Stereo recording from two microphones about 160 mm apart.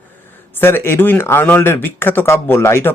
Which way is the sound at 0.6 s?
15° left (ahead or behind).